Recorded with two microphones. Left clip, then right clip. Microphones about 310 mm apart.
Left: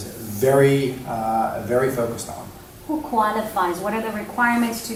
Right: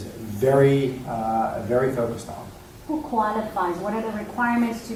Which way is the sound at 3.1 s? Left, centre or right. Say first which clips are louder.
Left 3 dB; centre.